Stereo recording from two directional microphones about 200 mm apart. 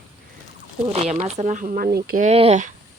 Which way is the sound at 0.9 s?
30° right (ahead or behind).